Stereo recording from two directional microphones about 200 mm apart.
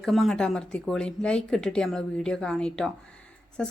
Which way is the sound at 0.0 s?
Centre (ahead or behind).